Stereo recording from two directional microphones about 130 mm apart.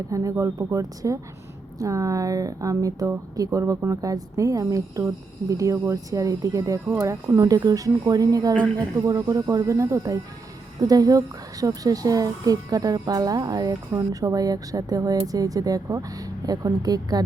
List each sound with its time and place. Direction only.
0.1 s speech: 25° right (ahead or behind)